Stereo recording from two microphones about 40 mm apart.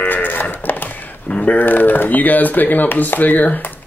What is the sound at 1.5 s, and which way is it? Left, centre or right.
Speech, left.